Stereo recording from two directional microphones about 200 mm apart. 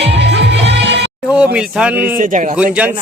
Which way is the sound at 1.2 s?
5° right (ahead or behind).